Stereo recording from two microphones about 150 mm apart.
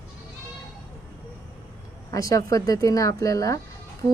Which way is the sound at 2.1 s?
20° left (ahead or behind).